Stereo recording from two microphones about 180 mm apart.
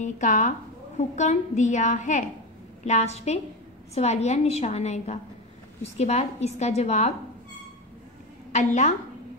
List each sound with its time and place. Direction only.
0.0 s a woman's voice: 45° left (ahead or behind)
8.5 s a woman's voice: 40° left (ahead or behind)